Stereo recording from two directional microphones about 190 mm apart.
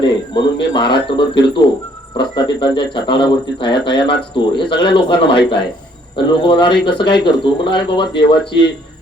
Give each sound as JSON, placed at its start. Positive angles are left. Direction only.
{"t": 0.0, "sound": "speech", "side_deg": 25}